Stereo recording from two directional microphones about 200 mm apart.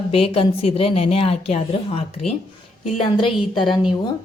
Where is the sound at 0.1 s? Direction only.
30° left (ahead or behind).